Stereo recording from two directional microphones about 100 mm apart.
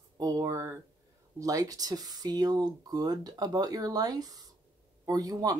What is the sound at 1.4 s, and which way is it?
Speech, 35° right (ahead or behind).